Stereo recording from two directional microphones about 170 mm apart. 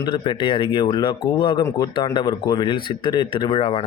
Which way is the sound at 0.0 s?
30° left (ahead or behind).